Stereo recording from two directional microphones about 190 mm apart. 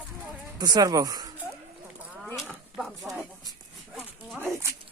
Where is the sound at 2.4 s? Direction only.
Centre (ahead or behind).